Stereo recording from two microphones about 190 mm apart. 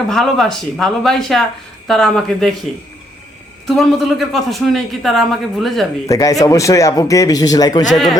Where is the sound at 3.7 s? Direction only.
Centre (ahead or behind).